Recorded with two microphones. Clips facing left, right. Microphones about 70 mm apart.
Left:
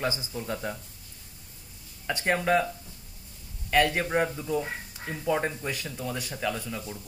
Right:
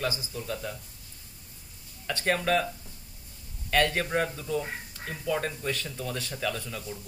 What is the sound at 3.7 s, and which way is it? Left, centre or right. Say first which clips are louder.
A man's voice: left 2 dB; centre.